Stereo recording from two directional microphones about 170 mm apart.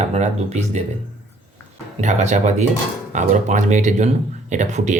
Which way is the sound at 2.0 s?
45° right (ahead or behind).